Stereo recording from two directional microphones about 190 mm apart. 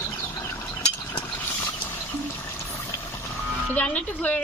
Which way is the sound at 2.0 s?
10° left (ahead or behind).